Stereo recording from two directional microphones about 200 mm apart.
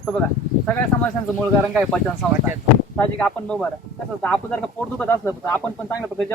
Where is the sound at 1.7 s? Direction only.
Centre (ahead or behind).